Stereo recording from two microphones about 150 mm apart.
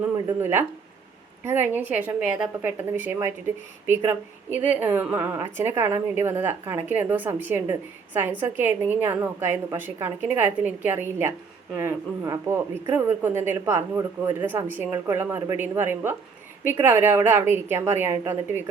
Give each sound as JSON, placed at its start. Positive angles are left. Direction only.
{"t": 0.3, "sound": "a woman's voice", "side_deg": -15}